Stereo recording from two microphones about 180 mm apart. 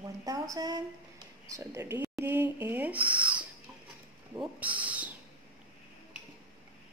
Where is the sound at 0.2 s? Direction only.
20° right (ahead or behind).